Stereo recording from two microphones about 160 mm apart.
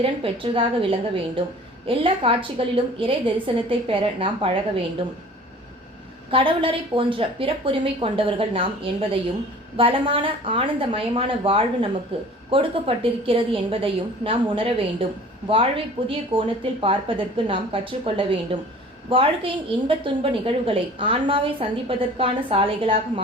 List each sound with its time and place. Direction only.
0.0 s a woman's voice: 35° right (ahead or behind)
6.3 s a woman's voice: 35° right (ahead or behind)